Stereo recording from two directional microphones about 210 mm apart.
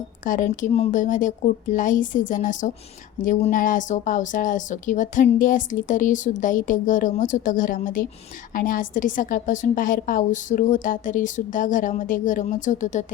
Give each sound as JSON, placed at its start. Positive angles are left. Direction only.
{"t": 0.3, "sound": "speech", "side_deg": 40}